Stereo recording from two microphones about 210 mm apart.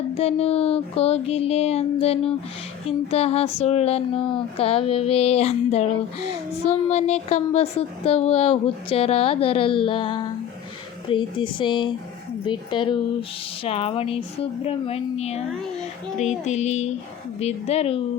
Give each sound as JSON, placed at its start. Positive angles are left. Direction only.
{"t": 0.1, "sound": "speech", "side_deg": 30}
{"t": 16.1, "sound": "music", "side_deg": 35}
{"t": 17.4, "sound": "speech", "side_deg": 30}